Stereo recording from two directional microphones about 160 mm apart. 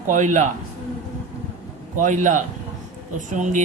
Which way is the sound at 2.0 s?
50° right (ahead or behind).